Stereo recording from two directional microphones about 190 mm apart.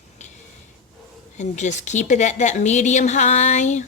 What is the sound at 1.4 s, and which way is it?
A woman's voice, 40° left (ahead or behind).